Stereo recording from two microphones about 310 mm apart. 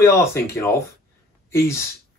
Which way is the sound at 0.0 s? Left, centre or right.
Centre.